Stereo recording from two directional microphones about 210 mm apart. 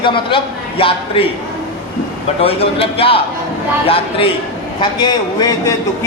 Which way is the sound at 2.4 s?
25° left (ahead or behind).